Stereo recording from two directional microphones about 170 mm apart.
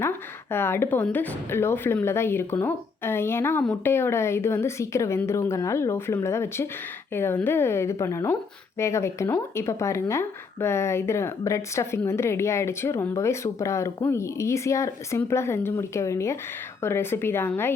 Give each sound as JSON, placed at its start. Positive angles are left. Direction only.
{"t": 0.5, "sound": "a woman's voice", "side_deg": 15}